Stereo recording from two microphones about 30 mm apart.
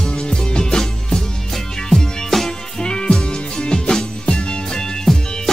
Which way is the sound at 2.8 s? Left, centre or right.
Left.